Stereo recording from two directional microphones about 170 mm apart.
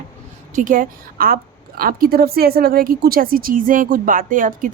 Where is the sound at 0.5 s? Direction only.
50° right (ahead or behind).